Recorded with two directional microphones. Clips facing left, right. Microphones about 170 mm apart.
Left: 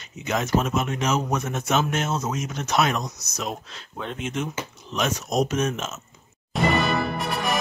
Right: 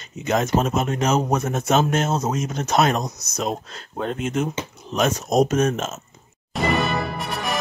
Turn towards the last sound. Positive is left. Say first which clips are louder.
# left 1 dB
turn(degrees=0)  # may be behind; listen again after turning